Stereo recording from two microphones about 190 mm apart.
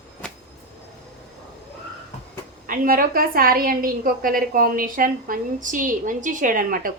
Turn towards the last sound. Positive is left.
turn(degrees=-45)  # may be behind; listen again after turning